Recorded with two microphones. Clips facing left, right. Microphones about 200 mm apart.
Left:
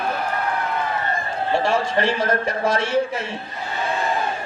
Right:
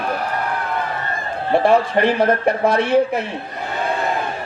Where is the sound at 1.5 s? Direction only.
60° right (ahead or behind).